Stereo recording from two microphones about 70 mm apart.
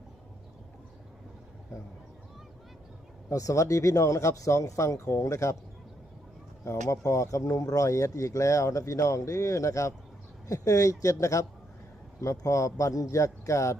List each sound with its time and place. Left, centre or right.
3.2 s speech: left
6.7 s speech: left